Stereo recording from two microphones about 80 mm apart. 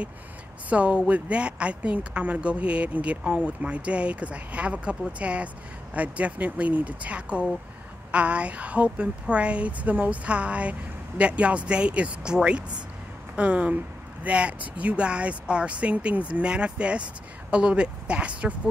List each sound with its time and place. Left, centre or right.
0.7 s a woman's voice: centre